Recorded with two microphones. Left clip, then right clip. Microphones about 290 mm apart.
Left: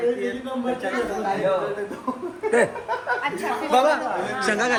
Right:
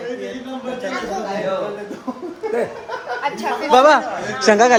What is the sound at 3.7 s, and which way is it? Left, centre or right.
Speech, right.